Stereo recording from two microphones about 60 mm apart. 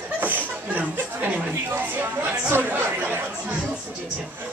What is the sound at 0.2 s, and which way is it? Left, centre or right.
Speech, right.